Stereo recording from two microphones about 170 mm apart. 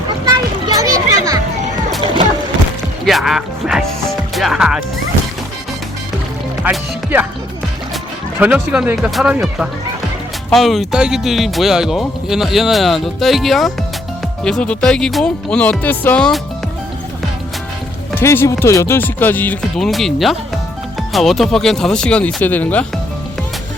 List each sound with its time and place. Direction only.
0.8 s children playing: 20° right (ahead or behind)
3.1 s speech: centre (ahead or behind)
6.6 s speech: 10° right (ahead or behind)
8.4 s speech: 5° right (ahead or behind)
18.1 s speech: 15° left (ahead or behind)